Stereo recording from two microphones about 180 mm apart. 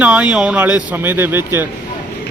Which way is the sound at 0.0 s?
5° right (ahead or behind).